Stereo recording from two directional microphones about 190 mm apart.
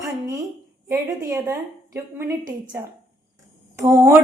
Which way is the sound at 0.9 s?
15° right (ahead or behind).